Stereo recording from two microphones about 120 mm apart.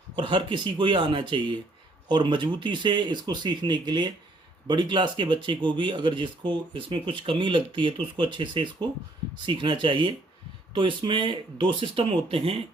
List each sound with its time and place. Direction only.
0.2 s speech: 40° right (ahead or behind)